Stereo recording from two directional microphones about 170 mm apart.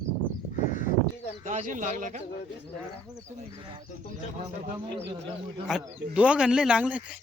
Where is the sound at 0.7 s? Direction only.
50° left (ahead or behind).